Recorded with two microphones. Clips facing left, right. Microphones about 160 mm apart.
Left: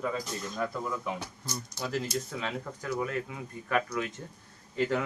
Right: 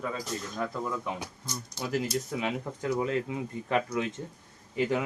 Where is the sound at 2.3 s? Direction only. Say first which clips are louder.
Right 4 dB; 15° right (ahead or behind).